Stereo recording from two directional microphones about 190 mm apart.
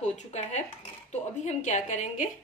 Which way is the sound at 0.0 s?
35° left (ahead or behind).